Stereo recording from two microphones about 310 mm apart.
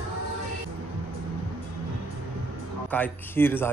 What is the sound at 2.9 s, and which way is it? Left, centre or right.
Speech, centre.